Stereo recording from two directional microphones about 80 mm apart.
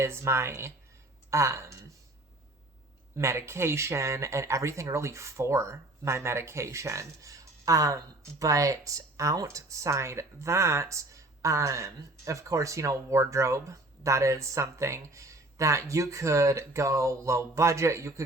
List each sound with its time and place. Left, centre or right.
0.0 s speech: right
3.2 s speech: right